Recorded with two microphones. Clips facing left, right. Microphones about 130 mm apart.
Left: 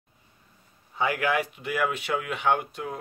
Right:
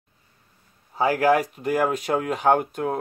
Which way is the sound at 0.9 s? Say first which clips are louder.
Right 6 dB; 35° right (ahead or behind).